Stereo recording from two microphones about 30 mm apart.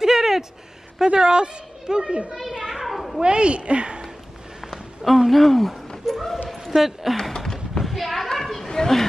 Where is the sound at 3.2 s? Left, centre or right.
Right.